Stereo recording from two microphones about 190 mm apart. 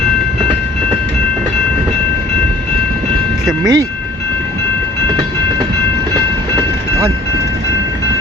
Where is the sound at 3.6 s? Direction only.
20° right (ahead or behind).